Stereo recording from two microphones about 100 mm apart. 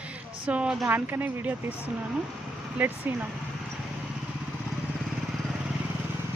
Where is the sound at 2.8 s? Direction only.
20° right (ahead or behind).